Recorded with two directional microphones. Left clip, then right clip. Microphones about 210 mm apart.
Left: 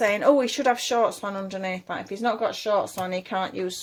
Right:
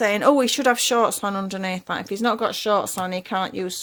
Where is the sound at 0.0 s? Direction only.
35° right (ahead or behind).